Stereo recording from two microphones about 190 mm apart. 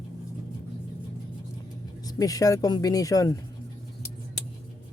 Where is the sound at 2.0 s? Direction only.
20° left (ahead or behind).